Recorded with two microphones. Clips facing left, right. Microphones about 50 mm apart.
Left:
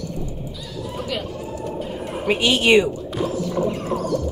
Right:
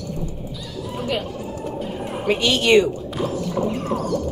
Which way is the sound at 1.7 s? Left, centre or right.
Centre.